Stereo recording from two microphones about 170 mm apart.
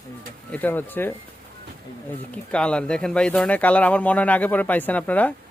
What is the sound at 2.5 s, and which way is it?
Speech, 5° left (ahead or behind).